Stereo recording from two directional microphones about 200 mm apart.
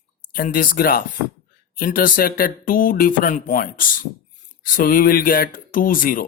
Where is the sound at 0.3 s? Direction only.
45° left (ahead or behind).